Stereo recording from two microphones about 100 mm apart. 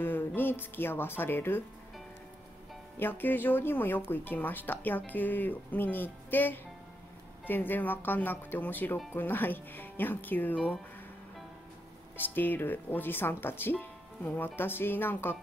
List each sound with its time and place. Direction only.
0.0 s speech: 20° left (ahead or behind)
3.0 s speech: 20° left (ahead or behind)
12.2 s speech: 20° left (ahead or behind)